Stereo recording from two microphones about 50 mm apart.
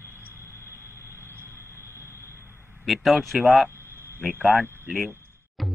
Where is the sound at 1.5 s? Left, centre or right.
Right.